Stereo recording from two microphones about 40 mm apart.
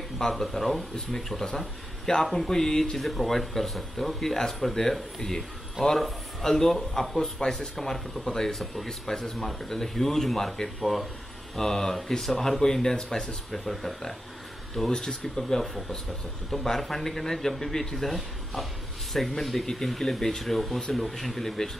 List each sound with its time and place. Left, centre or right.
0.2 s speech: centre
2.3 s speech: centre
13.5 s speech: centre
14.9 s speech: centre